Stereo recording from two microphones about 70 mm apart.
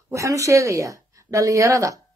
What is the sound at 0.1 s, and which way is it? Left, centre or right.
A woman's voice, right.